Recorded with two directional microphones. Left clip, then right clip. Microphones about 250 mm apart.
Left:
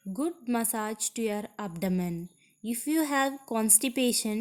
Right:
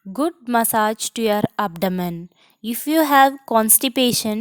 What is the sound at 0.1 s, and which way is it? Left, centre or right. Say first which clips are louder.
A woman's voice: right 11 dB; right.